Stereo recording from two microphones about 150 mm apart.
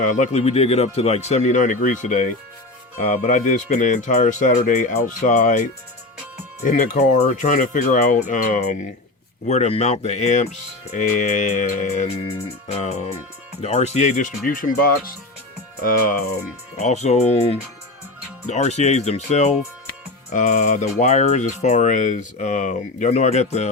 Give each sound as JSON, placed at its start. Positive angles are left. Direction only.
{"t": 0.0, "sound": "speech", "side_deg": 55}
{"t": 6.7, "sound": "speech", "side_deg": 60}
{"t": 9.5, "sound": "speech", "side_deg": 45}
{"t": 16.7, "sound": "speech", "side_deg": 50}
{"t": 19.9, "sound": "music", "side_deg": 55}
{"t": 21.0, "sound": "speech", "side_deg": 50}